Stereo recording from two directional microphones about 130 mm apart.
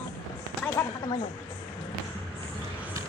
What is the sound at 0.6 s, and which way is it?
Speech, 15° left (ahead or behind).